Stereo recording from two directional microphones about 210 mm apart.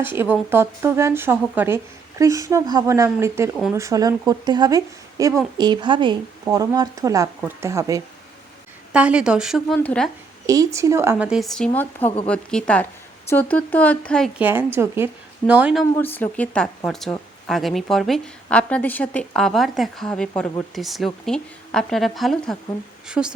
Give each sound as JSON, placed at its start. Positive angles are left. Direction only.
{"t": 0.0, "sound": "a woman's voice", "side_deg": -10}
{"t": 10.4, "sound": "speech", "side_deg": -15}
{"t": 14.3, "sound": "a woman's voice", "side_deg": -10}
{"t": 16.0, "sound": "speech", "side_deg": 10}